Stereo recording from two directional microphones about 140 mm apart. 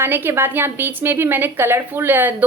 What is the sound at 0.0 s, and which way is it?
A woman's voice, 15° right (ahead or behind).